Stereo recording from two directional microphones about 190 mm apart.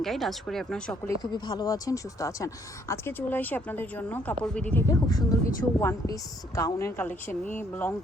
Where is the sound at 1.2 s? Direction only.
20° left (ahead or behind); by 4.8 s 5° left (ahead or behind).